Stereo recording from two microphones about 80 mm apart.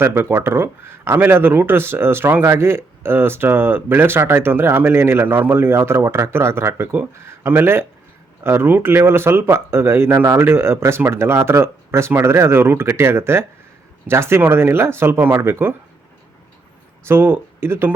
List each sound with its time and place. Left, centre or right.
0.0 s speech: right
17.1 s speech: right